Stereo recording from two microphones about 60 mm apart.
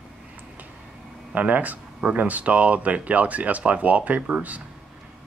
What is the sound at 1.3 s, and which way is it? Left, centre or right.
Speech, right.